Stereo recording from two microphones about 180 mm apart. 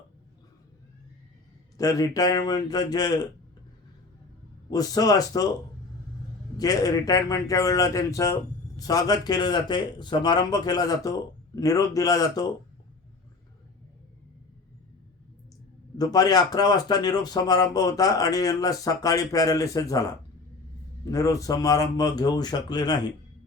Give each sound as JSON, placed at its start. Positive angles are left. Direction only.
{"t": 1.8, "sound": "a man's voice", "side_deg": 20}
{"t": 4.7, "sound": "a man's voice", "side_deg": 20}
{"t": 6.6, "sound": "a man's voice", "side_deg": 20}
{"t": 16.0, "sound": "a man's voice", "side_deg": 20}